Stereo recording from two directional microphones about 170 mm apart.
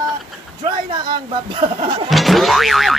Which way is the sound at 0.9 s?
30° right (ahead or behind).